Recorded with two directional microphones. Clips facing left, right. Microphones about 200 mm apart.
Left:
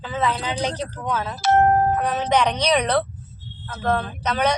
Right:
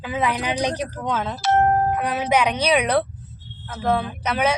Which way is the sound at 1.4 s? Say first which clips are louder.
Left 2 dB; 45° left (ahead or behind).